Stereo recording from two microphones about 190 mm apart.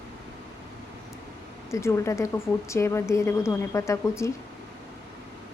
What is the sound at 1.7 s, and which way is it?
A woman's voice, 15° left (ahead or behind).